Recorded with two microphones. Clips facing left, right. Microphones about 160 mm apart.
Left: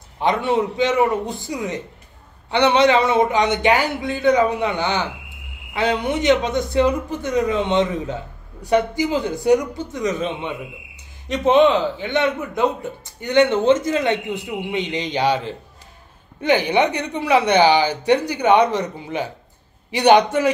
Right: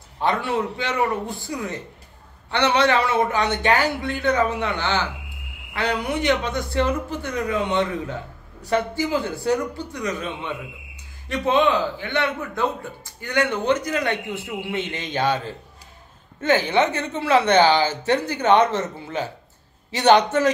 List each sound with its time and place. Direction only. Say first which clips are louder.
0.2 s a man's voice: left 4 dB; 20° left (ahead or behind)